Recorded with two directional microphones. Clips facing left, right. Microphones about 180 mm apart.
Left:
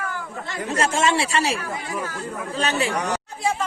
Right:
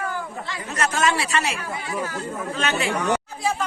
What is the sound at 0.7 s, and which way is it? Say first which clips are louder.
A woman's voice: left 2 dB; 30° left (ahead or behind).